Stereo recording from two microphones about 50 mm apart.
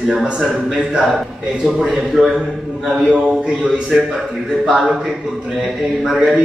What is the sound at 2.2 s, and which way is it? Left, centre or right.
Speech, centre.